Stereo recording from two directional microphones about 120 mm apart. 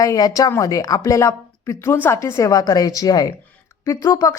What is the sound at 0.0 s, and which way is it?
A woman's voice, 30° left (ahead or behind).